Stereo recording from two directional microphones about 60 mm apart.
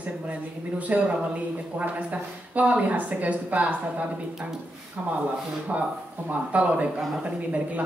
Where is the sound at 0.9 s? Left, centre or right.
Right.